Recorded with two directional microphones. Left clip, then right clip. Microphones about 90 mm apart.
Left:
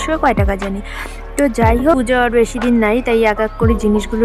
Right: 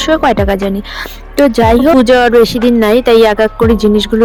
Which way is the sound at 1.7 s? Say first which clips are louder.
Right 6 dB; 60° right (ahead or behind).